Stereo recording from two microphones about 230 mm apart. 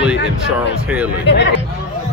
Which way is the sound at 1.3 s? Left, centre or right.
Left.